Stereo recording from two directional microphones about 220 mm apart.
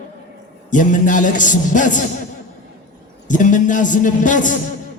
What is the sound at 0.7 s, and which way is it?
A man's voice, 35° left (ahead or behind).